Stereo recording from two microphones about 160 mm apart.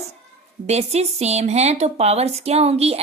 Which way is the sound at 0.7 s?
40° right (ahead or behind).